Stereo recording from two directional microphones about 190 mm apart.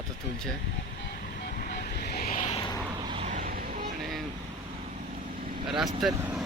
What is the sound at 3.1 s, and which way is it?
Vehicle, 35° right (ahead or behind).